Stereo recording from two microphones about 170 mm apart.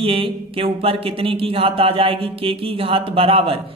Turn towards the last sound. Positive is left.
turn(degrees=-35)  # may be behind; listen again after turning